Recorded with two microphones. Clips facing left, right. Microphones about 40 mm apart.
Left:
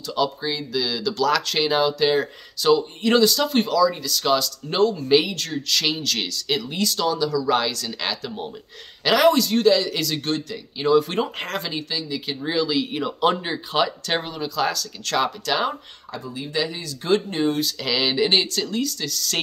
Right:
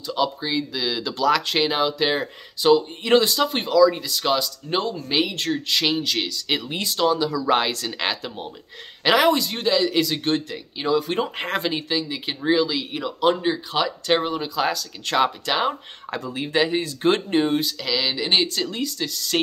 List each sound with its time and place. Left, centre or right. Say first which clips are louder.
0.0 s speech: even; centre
5.3 s speech: right 2 dB; right
5.8 s speech: even; centre
6.5 s speech: left 2 dB; right
10.9 s speech: left 3 dB; centre
11.4 s speech: right 3 dB; right; by 13.9 s centre
14.0 s speech: right 4 dB; centre
16.1 s speech: right 4 dB; right
16.5 s speech: right 6 dB; right
17.7 s speech: left 3 dB; centre
18.3 s speech: even; centre
18.7 s speech: left 1 dB; centre